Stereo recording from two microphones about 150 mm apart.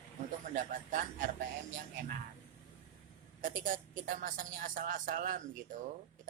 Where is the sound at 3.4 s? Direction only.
65° right (ahead or behind).